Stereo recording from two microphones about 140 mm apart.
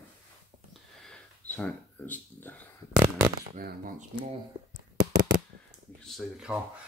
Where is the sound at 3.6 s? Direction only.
90° right.